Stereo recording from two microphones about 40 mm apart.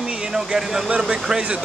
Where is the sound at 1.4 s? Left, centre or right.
Right.